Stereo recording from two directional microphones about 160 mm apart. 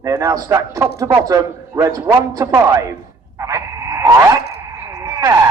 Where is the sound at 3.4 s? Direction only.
20° right (ahead or behind).